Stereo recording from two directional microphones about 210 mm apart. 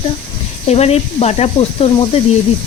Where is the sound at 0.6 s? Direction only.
30° left (ahead or behind).